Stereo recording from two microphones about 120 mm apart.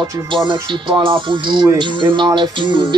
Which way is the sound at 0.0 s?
40° right (ahead or behind).